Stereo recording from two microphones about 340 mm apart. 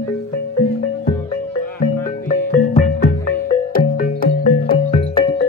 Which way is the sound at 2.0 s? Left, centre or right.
Left.